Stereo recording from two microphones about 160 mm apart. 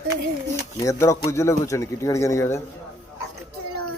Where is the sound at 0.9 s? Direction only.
20° left (ahead or behind).